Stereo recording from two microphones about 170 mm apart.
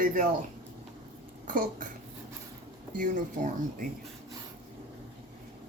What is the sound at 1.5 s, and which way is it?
Speech, 50° right (ahead or behind).